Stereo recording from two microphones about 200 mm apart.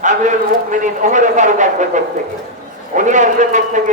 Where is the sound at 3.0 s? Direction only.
35° right (ahead or behind).